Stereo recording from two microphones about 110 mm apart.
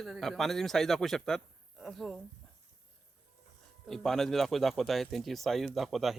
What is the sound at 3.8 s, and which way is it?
Speech, centre (ahead or behind).